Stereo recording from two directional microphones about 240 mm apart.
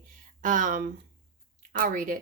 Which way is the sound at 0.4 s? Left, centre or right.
Right.